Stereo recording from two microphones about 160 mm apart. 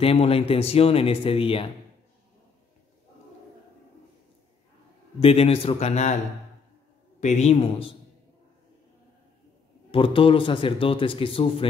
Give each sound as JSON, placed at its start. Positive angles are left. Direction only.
{"t": 0.0, "sound": "a man's voice", "side_deg": 40}
{"t": 5.2, "sound": "a man's voice", "side_deg": 35}
{"t": 7.2, "sound": "a man's voice", "side_deg": 45}
{"t": 9.8, "sound": "a man's voice", "side_deg": 35}